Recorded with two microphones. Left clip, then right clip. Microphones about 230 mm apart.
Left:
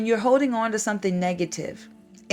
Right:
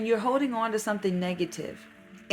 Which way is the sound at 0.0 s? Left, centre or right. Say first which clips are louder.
Left 5 dB; left.